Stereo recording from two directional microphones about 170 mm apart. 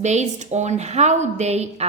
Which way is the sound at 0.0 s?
45° right (ahead or behind).